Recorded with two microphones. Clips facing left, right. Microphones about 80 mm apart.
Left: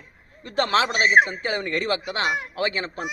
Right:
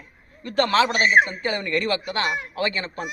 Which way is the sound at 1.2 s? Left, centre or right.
Left.